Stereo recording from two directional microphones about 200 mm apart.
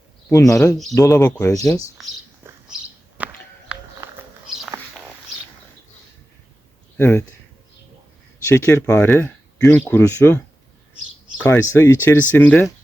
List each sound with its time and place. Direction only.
0.3 s speech: 15° left (ahead or behind)
2.4 s bird: 10° right (ahead or behind)
3.2 s a sound: 5° right (ahead or behind)
6.9 s speech: 10° left (ahead or behind)
8.4 s speech: 10° left (ahead or behind)